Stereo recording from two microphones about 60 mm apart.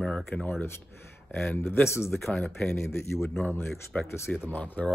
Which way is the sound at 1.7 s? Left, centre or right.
Left.